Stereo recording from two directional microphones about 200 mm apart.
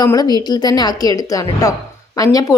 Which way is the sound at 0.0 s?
20° left (ahead or behind).